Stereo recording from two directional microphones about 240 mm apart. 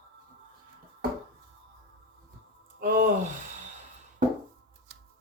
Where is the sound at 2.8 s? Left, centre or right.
Right.